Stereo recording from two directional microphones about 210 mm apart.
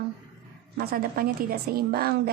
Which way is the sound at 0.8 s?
45° right (ahead or behind).